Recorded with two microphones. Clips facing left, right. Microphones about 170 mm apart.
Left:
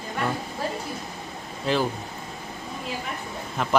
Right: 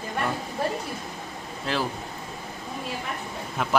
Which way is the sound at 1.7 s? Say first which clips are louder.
Left 4 dB; centre (ahead or behind).